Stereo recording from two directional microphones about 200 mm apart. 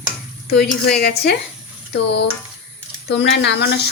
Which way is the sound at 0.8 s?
50° left (ahead or behind).